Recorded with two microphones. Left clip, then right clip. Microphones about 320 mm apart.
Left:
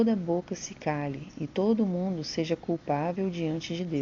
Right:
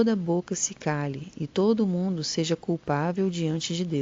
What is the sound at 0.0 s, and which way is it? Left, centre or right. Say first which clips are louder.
Speech: right 2 dB; right.